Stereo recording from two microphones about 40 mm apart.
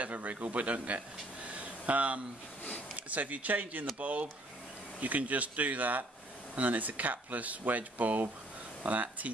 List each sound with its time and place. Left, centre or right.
0.0 s speech: right